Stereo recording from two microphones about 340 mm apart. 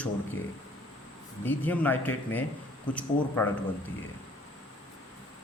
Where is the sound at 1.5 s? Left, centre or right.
Centre.